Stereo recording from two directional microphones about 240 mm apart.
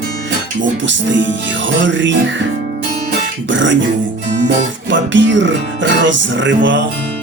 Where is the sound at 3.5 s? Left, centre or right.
Right.